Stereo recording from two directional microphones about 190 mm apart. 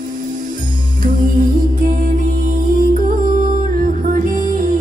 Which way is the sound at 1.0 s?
45° right (ahead or behind).